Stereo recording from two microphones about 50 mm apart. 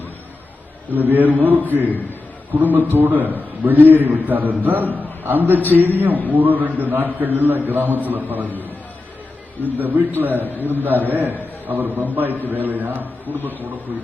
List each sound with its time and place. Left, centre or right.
0.9 s a man's voice: right
9.7 s a man's voice: right